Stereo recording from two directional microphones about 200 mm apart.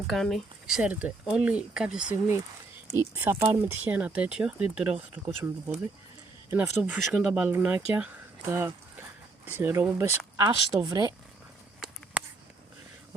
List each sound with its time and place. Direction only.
0.1 s speech: centre (ahead or behind); by 11.1 s 20° right (ahead or behind)